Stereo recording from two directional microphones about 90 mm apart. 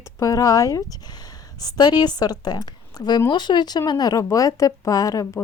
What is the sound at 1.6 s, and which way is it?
A woman's voice, 50° left (ahead or behind).